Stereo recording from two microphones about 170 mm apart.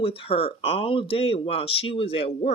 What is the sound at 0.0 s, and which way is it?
Speech, 30° left (ahead or behind).